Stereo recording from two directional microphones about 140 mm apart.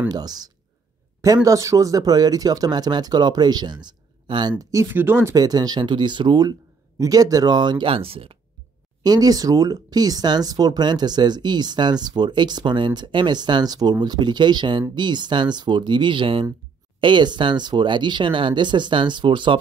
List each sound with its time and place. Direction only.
0.1 s speech: 30° right (ahead or behind)
9.0 s speech: 25° right (ahead or behind)